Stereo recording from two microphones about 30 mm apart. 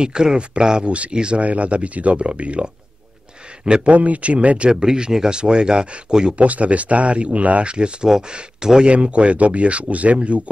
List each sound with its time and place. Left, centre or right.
0.0 s speech: right
0.8 s speech: right
1.1 s speech: right
1.4 s speech: right
3.6 s speech: right
3.9 s speech: right
5.1 s speech: right
6.3 s speech: right
7.7 s speech: right
8.8 s speech: right